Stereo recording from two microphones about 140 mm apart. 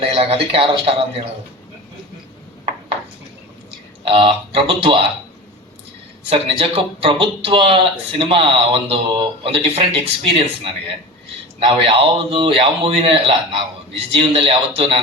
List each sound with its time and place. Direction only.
0.0 s speech: 40° right (ahead or behind)
4.0 s speech: 40° right (ahead or behind)
6.3 s speech: 40° right (ahead or behind)
11.7 s speech: 40° right (ahead or behind)